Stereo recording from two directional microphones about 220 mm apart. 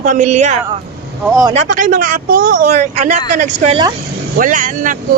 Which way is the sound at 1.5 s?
35° right (ahead or behind).